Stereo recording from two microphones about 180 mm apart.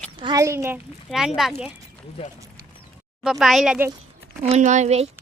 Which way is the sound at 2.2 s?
35° left (ahead or behind).